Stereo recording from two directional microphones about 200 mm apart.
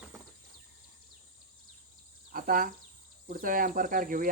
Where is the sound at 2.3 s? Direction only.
45° right (ahead or behind).